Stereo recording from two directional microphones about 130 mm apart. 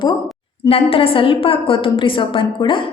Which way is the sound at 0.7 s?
45° left (ahead or behind).